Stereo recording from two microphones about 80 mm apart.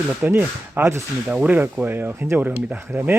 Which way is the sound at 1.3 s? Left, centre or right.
Centre.